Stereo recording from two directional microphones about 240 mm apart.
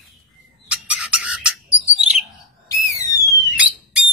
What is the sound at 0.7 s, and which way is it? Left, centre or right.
Bird, centre.